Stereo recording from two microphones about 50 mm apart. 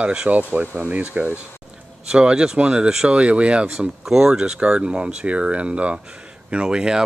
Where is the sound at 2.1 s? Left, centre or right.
Centre.